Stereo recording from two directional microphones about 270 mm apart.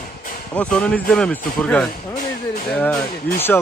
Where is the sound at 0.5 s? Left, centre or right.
Centre.